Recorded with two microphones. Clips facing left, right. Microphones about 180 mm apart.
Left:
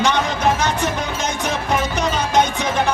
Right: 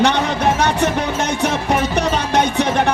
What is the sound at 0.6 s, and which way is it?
Music, 65° right (ahead or behind).